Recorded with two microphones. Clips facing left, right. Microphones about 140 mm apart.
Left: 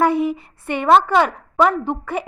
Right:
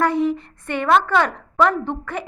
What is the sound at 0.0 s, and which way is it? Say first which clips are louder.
A woman's voice: left 1 dB; 10° left (ahead or behind).